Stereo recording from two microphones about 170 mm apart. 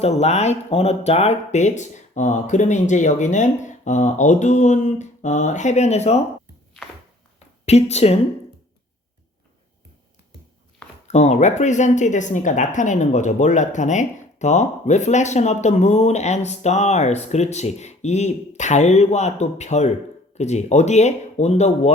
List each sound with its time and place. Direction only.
0.0 s speech: 40° left (ahead or behind)
7.6 s a woman's voice: 40° left (ahead or behind)
11.1 s speech: 40° left (ahead or behind)